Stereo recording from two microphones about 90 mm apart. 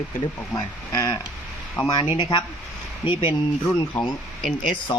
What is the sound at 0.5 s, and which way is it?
Speech, 40° left (ahead or behind).